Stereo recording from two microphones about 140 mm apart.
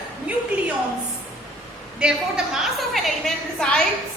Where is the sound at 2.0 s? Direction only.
5° right (ahead or behind).